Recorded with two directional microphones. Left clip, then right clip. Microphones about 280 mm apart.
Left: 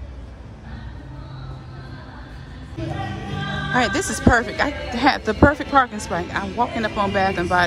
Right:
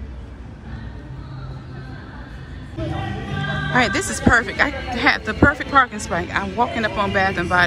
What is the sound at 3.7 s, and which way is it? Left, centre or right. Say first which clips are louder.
Speech: right 1 dB; centre.